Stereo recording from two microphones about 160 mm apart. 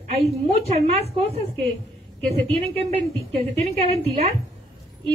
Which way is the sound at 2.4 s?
40° right (ahead or behind).